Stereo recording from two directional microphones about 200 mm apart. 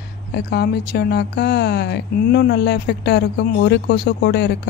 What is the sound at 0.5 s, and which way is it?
Speech, 55° left (ahead or behind).